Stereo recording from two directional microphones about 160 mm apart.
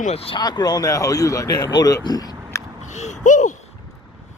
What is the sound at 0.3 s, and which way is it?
Speech, 25° left (ahead or behind).